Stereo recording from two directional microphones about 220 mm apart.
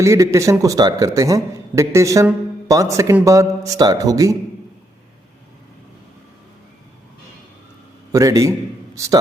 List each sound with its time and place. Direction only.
0.0 s a man's voice: 15° right (ahead or behind)
8.1 s a man's voice: 15° right (ahead or behind)